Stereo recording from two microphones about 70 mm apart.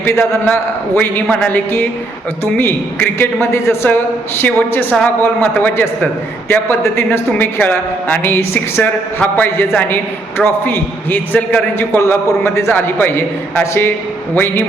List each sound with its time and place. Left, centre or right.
0.0 s a man's voice: left
11.8 s a man's voice: left